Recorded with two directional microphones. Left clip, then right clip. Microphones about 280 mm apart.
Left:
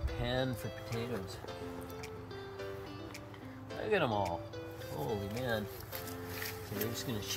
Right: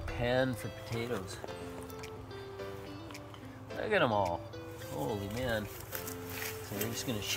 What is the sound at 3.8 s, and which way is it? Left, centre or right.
Speech, centre.